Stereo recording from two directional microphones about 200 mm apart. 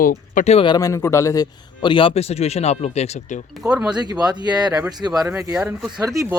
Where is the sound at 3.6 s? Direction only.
5° right (ahead or behind).